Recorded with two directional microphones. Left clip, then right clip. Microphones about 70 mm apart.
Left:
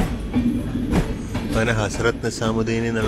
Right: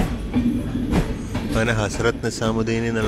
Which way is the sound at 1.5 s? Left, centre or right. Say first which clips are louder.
Even; right.